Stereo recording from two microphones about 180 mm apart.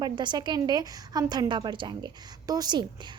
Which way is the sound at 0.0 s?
25° right (ahead or behind).